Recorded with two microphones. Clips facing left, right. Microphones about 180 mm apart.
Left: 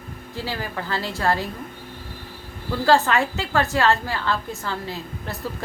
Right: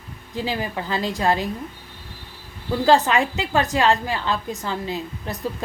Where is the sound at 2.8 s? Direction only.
15° right (ahead or behind).